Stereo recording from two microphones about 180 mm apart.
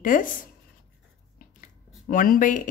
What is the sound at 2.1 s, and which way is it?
Speech, 50° left (ahead or behind).